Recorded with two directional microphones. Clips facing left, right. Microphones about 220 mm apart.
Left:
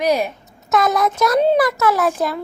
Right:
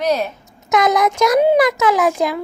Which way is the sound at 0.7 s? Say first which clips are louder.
Right 2 dB; 15° right (ahead or behind).